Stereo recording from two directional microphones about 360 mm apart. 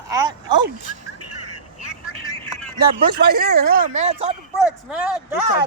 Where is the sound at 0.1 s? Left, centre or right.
Centre.